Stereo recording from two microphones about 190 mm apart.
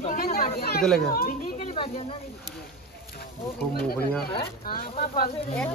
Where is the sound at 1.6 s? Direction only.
30° left (ahead or behind).